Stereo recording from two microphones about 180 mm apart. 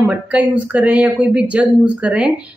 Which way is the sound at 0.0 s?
5° right (ahead or behind).